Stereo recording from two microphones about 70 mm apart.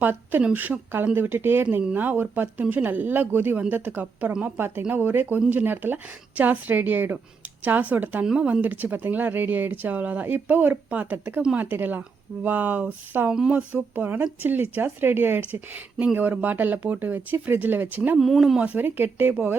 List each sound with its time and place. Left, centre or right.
0.0 s speech: right
18.2 s speech: centre
18.6 s speech: right